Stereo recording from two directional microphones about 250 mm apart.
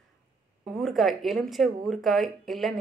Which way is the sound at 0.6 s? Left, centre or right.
Centre.